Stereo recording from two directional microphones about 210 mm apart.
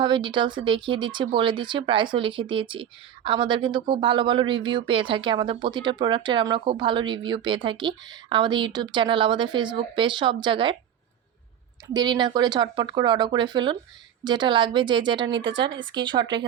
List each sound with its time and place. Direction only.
0.0 s speech: 20° right (ahead or behind)
11.9 s speech: 20° right (ahead or behind)